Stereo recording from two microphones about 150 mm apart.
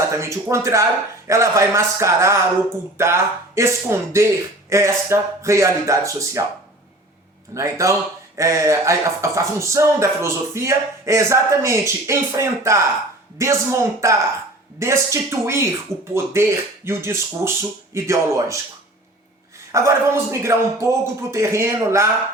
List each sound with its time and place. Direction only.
0.1 s speech: 20° right (ahead or behind)
7.5 s speech: 20° right (ahead or behind)
19.7 s speech: 20° right (ahead or behind)